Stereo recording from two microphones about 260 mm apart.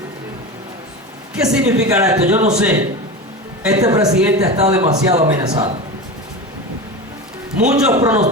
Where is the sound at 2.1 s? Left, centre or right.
Right.